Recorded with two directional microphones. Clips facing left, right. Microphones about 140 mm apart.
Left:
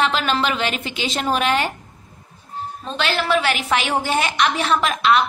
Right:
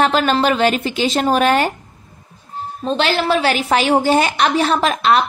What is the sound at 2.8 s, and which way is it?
A woman's voice, 30° right (ahead or behind).